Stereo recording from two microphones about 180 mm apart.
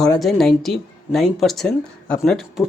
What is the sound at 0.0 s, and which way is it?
Speech, centre (ahead or behind).